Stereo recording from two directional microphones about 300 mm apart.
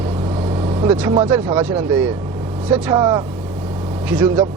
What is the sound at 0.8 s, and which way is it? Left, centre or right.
Speech, centre.